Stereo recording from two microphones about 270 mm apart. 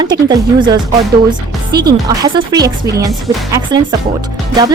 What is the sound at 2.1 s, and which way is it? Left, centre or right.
Speech, centre.